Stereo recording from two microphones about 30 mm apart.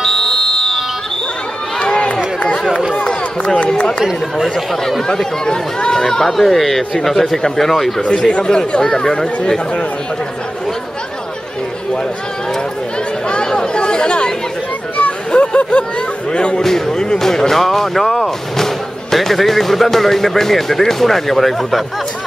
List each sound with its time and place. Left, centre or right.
0.0 s music: centre
1.8 s run: left
5.5 s speech: left
6.2 s speech: centre
8.0 s speech: left
9.0 s speech: centre
13.5 s chatter: left
15.0 s a sound: left
16.3 s speech: left
16.6 s speech: centre